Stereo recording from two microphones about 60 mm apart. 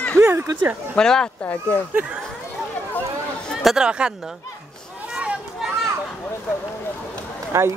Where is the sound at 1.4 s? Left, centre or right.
Left.